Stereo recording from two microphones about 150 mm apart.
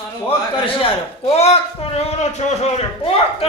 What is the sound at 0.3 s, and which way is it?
A man's voice, 40° left (ahead or behind).